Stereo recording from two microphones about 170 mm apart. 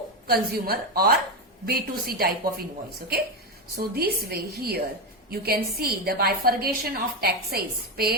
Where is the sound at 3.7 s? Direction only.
65° right (ahead or behind).